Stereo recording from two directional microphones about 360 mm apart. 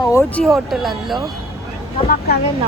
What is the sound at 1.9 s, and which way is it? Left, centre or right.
Speech, left.